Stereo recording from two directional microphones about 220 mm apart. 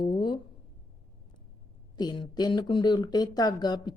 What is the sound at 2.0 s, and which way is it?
A woman's voice, 20° left (ahead or behind).